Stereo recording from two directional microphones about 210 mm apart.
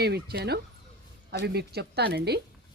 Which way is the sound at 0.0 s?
50° right (ahead or behind).